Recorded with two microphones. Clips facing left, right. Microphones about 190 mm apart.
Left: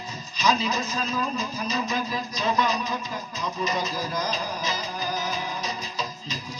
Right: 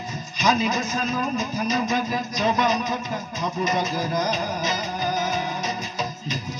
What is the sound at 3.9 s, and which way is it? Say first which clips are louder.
Music: right 4 dB; 50° right (ahead or behind).